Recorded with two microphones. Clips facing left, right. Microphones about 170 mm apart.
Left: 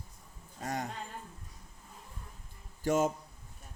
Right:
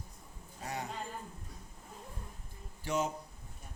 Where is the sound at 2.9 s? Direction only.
45° left (ahead or behind).